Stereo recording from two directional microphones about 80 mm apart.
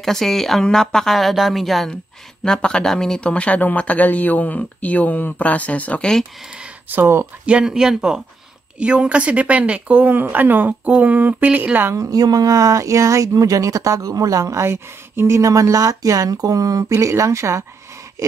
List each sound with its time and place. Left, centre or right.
0.0 s a woman's voice: centre
6.9 s a woman's voice: right
7.4 s a woman's voice: centre
11.9 s speech: right